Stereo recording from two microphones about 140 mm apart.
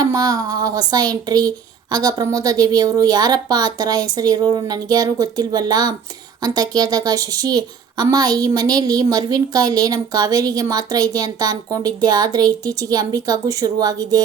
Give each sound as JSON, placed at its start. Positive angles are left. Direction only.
{"t": 0.0, "sound": "a woman's voice", "side_deg": -25}